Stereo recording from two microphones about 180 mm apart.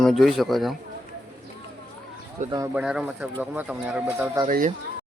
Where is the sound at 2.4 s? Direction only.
45° right (ahead or behind).